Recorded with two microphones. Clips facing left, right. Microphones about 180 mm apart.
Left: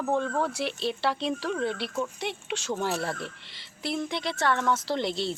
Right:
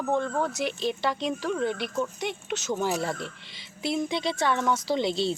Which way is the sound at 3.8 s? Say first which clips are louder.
Right 3 dB; 20° right (ahead or behind).